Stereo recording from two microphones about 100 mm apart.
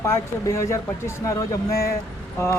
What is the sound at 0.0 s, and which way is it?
Speech, 30° left (ahead or behind).